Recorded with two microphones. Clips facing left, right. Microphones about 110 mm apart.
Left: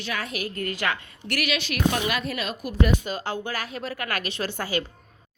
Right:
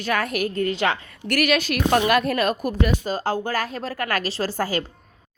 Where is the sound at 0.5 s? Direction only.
25° right (ahead or behind).